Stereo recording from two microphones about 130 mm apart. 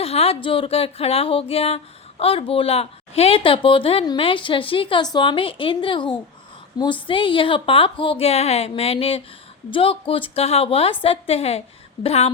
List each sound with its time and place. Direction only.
0.0 s a woman's voice: 50° left (ahead or behind)